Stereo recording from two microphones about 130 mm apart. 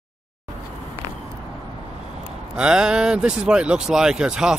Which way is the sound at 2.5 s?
5° right (ahead or behind).